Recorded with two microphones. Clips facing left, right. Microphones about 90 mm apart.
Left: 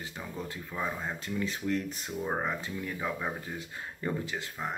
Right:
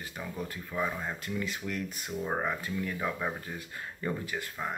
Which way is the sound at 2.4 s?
25° left (ahead or behind).